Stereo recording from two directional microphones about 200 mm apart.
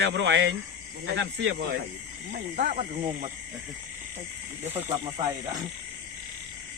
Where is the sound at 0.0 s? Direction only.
65° right (ahead or behind).